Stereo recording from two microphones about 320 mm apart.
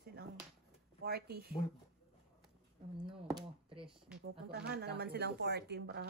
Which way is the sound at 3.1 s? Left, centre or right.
Centre.